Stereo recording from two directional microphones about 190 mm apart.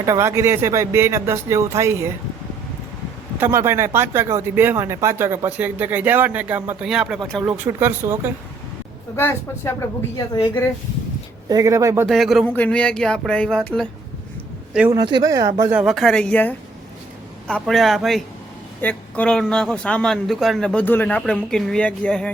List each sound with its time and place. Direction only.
0.0 s speech: 15° right (ahead or behind)
3.4 s speech: 15° right (ahead or behind)
9.1 s speech: 15° left (ahead or behind)
11.4 s speech: 20° right (ahead or behind)
12.0 s a man's voice: centre (ahead or behind)
14.7 s a man's voice: 5° right (ahead or behind)
14.9 s a man's voice: 20° right (ahead or behind); by 22.3 s 5° left (ahead or behind)